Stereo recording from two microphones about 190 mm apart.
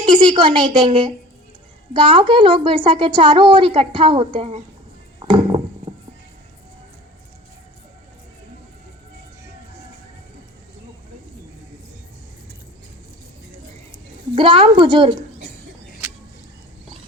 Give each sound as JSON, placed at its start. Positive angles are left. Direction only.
{"t": 0.0, "sound": "a woman's voice", "side_deg": -25}
{"t": 5.3, "sound": "a sound", "side_deg": -30}
{"t": 14.3, "sound": "a woman's voice", "side_deg": -25}